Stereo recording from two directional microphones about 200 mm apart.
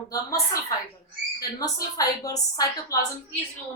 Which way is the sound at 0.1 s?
15° left (ahead or behind).